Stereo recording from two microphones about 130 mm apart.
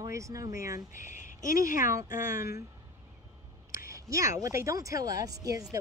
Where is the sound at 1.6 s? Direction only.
90° left.